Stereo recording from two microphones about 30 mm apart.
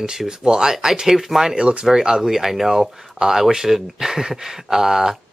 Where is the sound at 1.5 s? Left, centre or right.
Right.